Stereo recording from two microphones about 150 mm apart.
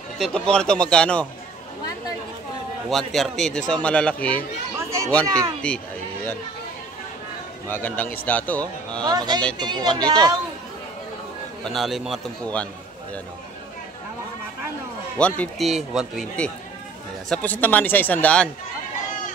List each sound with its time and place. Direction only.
0.2 s a man's voice: 5° left (ahead or behind)
2.9 s a man's voice: centre (ahead or behind)
4.7 s chatter: 20° right (ahead or behind)
5.2 s speech: 25° right (ahead or behind)
7.6 s speech: 15° left (ahead or behind)
9.0 s speech: 30° right (ahead or behind)
11.6 s a man's voice: centre (ahead or behind)
15.1 s a man's voice: 10° left (ahead or behind)
17.3 s speech: 10° left (ahead or behind)